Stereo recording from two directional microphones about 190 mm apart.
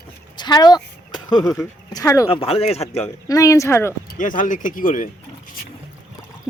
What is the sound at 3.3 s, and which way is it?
Speech, 15° left (ahead or behind).